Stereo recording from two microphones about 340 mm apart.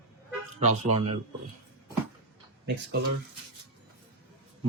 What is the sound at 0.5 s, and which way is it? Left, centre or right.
Speech, centre.